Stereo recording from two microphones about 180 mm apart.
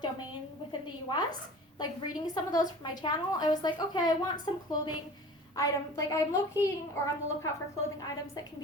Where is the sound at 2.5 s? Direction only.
20° left (ahead or behind).